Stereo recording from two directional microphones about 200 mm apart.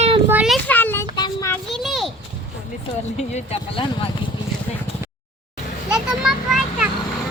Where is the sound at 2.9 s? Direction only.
35° left (ahead or behind).